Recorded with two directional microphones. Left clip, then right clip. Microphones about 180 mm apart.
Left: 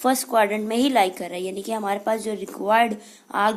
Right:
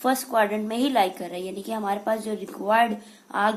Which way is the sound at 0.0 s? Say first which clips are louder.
Left 3 dB; 35° left (ahead or behind).